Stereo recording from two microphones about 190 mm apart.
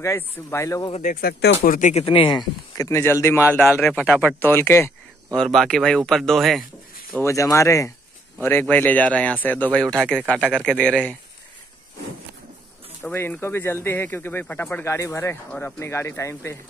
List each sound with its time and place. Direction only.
0.0 s speech: 15° left (ahead or behind)
0.9 s speech: 50° left (ahead or behind)
2.0 s speech: 25° left (ahead or behind); by 6.6 s centre (ahead or behind)
7.1 s speech: 15° left (ahead or behind)
13.0 s speech: 10° left (ahead or behind)